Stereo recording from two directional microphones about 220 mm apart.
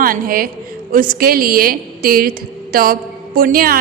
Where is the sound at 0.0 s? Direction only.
40° right (ahead or behind).